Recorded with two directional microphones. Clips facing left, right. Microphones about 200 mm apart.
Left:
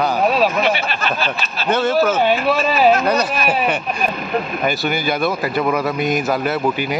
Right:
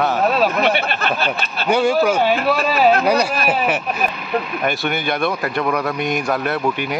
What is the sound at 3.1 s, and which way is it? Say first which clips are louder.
A man's voice: right 1 dB; 10° right (ahead or behind).